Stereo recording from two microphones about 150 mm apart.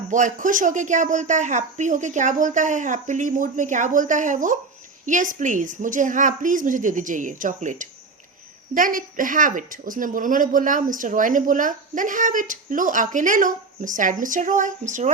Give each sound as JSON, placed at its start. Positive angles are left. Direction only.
{"t": 0.1, "sound": "speech", "side_deg": -60}